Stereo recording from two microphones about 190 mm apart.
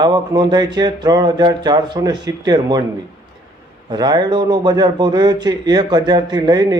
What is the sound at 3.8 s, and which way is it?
A man's voice, 20° right (ahead or behind).